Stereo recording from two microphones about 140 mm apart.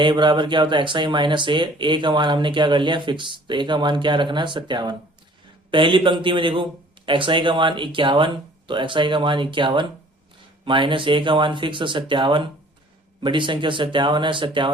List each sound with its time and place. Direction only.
0.0 s speech: 35° right (ahead or behind)